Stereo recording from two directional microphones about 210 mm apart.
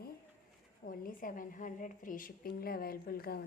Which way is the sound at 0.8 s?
40° left (ahead or behind).